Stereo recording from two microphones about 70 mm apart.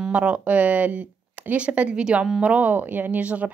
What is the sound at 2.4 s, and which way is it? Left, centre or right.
Speech, right.